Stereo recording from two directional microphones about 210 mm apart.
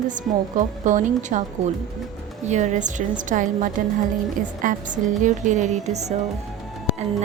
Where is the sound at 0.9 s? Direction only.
35° right (ahead or behind).